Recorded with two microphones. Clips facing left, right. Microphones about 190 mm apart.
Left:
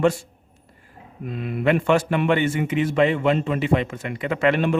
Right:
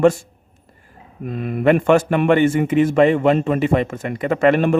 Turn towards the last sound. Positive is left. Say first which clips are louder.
# right 5 dB
turn(degrees=-45)  # may be behind; listen again after turning